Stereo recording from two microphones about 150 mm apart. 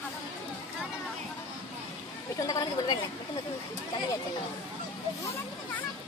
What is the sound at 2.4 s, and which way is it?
Speech, 25° left (ahead or behind).